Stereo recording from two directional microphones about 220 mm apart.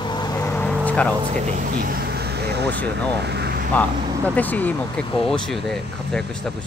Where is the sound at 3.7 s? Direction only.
5° left (ahead or behind).